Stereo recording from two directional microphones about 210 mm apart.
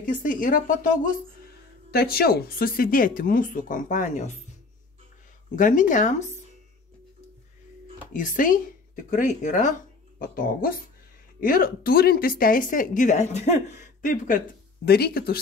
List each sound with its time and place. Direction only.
0.0 s speech: 40° left (ahead or behind)
5.6 s speech: 40° left (ahead or behind)
8.1 s speech: 40° left (ahead or behind)